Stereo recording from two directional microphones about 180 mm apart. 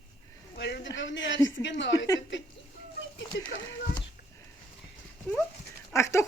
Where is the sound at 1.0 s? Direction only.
90° left.